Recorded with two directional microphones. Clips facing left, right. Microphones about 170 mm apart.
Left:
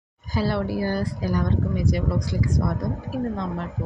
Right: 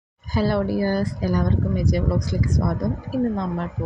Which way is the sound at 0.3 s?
45° right (ahead or behind).